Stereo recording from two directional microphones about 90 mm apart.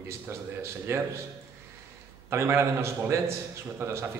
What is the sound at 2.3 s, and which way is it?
A man's voice, 30° right (ahead or behind).